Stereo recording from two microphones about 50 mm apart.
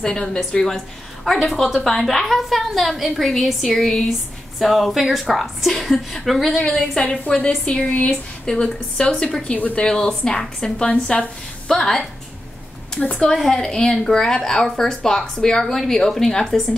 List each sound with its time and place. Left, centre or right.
0.0 s a woman's voice: centre
9.4 s speech: left
9.8 s speech: centre
13.1 s speech: centre